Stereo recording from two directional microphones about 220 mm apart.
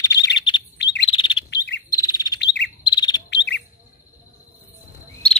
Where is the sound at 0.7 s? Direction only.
50° left (ahead or behind).